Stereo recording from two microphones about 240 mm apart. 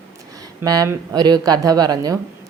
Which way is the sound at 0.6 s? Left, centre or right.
Centre.